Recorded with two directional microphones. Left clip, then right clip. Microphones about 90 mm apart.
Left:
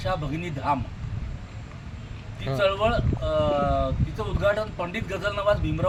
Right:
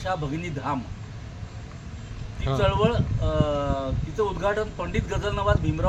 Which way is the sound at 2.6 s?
10° left (ahead or behind).